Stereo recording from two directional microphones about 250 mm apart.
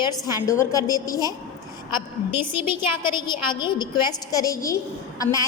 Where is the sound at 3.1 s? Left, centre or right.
Centre.